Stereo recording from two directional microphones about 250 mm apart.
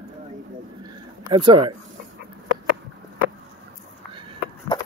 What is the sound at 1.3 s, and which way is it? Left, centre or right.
Speech, centre.